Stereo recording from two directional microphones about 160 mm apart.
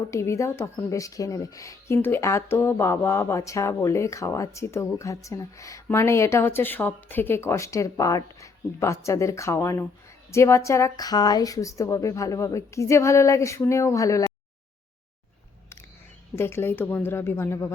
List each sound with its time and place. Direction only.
0.1 s a woman's voice: 20° left (ahead or behind)
16.3 s a woman's voice: 15° left (ahead or behind)